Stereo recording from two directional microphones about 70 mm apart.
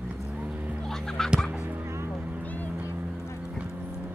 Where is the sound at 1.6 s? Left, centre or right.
Right.